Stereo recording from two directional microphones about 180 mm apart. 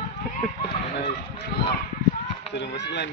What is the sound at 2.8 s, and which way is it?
Speech, 75° left (ahead or behind).